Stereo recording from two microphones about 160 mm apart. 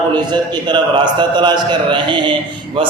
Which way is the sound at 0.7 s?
30° right (ahead or behind).